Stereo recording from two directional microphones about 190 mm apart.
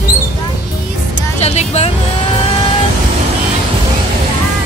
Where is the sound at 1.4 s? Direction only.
35° left (ahead or behind).